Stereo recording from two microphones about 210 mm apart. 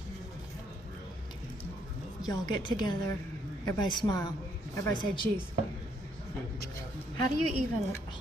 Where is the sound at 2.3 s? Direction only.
20° left (ahead or behind).